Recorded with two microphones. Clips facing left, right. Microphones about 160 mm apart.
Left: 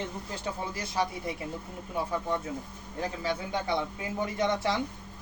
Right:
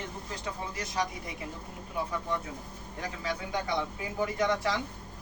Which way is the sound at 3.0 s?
30° left (ahead or behind).